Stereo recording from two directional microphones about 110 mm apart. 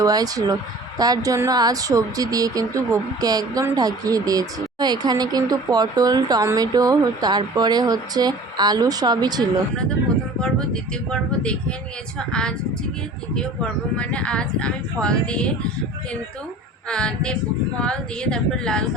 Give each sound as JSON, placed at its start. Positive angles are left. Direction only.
{"t": 0.0, "sound": "speech", "side_deg": -35}
{"t": 11.1, "sound": "speech", "side_deg": 10}
{"t": 16.9, "sound": "speech", "side_deg": 10}